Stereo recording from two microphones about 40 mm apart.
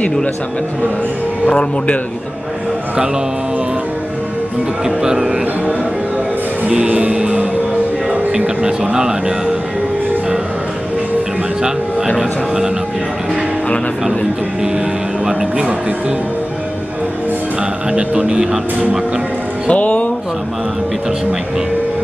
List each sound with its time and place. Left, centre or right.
4.8 s speech: centre
6.9 s music: right
8.9 s speech: centre
12.2 s speech: centre
17.9 s speech: centre
19.7 s speech: left